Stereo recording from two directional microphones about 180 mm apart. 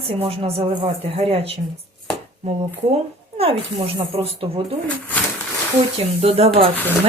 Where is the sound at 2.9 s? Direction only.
35° right (ahead or behind).